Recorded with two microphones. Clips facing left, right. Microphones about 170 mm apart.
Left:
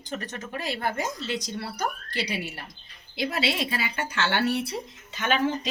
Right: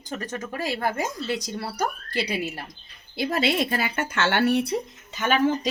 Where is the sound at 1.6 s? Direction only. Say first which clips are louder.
Right 3 dB; 40° right (ahead or behind).